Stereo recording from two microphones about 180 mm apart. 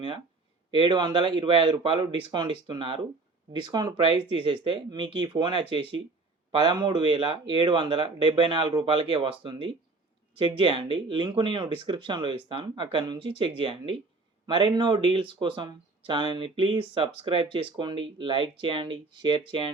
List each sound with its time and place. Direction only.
0.7 s speech: 25° right (ahead or behind)